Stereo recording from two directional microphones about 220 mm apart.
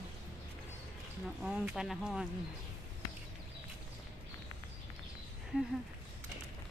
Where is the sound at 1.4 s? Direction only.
5° right (ahead or behind).